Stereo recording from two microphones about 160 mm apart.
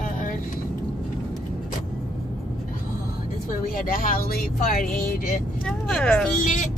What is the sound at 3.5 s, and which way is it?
Speech, 60° left (ahead or behind).